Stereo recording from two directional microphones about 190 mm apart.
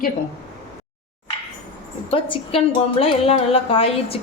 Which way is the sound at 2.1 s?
30° left (ahead or behind).